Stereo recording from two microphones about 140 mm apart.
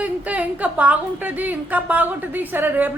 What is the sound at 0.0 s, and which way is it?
A woman's voice, 10° right (ahead or behind).